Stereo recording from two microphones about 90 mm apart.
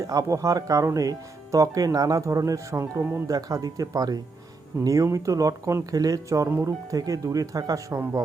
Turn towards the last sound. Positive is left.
turn(degrees=-40)  # may be behind; listen again after turning